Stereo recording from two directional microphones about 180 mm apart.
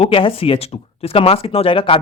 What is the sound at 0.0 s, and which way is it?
Speech, 30° left (ahead or behind).